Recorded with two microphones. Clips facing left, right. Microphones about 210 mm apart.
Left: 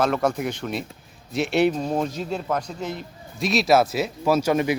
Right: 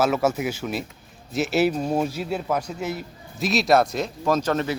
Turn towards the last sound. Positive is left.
turn(degrees=10)  # may be behind; listen again after turning